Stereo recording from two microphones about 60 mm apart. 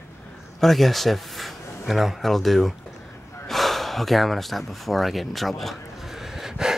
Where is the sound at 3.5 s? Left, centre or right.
Centre.